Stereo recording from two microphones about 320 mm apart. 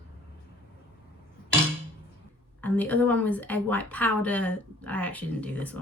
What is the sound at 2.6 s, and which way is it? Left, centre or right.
A woman's voice, centre.